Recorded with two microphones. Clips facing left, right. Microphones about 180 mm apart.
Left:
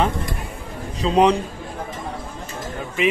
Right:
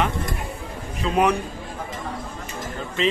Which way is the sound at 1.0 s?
30° left (ahead or behind).